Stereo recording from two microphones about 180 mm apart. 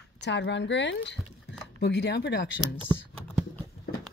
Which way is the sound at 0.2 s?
80° left.